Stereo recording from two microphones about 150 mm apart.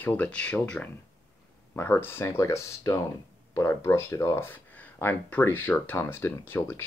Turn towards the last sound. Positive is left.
turn(degrees=15)  # may be behind; listen again after turning